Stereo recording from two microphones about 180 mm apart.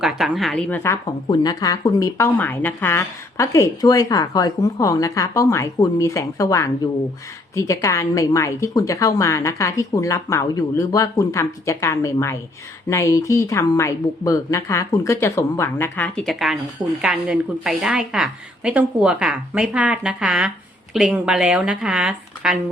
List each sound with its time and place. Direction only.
0.0 s a woman's voice: centre (ahead or behind)